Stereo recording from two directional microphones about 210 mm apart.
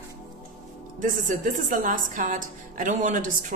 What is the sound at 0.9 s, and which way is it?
A woman's voice, 40° right (ahead or behind).